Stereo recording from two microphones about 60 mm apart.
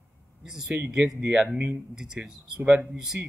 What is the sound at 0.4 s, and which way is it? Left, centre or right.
A man's voice, centre.